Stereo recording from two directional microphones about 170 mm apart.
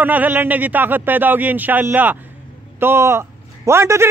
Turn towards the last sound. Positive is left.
turn(degrees=-15)  # may be behind; listen again after turning